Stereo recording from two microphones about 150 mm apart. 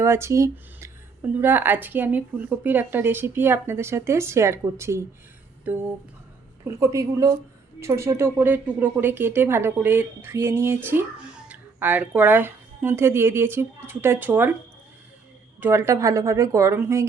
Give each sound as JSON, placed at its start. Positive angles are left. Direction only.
{"t": 0.0, "sound": "a woman's voice", "side_deg": -15}
{"t": 15.6, "sound": "speech", "side_deg": -20}